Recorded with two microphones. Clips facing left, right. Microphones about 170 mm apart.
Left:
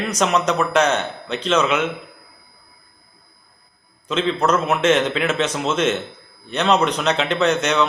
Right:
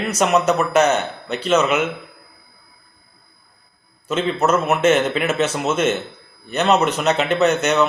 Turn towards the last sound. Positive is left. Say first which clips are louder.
# right 2 dB
turn(degrees=-5)  # may be behind; listen again after turning